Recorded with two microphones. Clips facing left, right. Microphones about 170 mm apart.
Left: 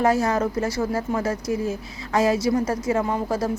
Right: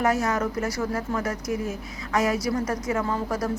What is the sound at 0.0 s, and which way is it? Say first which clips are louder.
A woman's voice: left 3 dB; 30° left (ahead or behind).